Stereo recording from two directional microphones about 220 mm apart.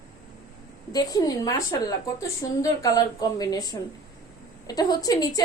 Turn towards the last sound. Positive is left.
turn(degrees=15)  # may be behind; listen again after turning